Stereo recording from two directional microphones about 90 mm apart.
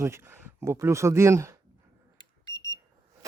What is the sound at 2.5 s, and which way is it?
Alarm clock, 40° left (ahead or behind).